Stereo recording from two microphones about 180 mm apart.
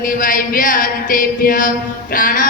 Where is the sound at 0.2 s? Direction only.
50° left (ahead or behind).